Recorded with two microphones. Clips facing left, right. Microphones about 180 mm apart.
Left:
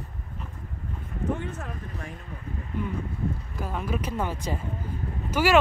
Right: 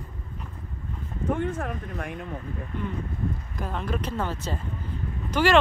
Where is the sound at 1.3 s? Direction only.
55° right (ahead or behind).